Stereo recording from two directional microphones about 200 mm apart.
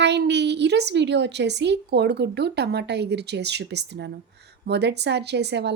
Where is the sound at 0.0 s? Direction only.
60° right (ahead or behind).